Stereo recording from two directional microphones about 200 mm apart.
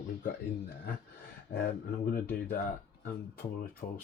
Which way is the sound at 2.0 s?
45° left (ahead or behind).